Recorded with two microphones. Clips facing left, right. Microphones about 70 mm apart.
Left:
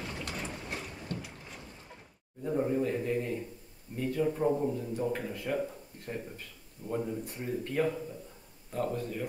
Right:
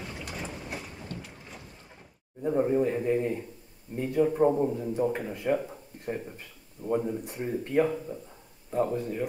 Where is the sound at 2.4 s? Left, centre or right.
Right.